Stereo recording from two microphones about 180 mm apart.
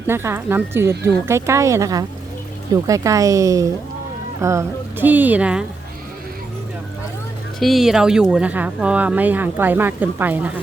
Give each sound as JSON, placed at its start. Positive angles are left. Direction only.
{"t": 0.1, "sound": "speech", "side_deg": -15}
{"t": 7.6, "sound": "speech", "side_deg": 0}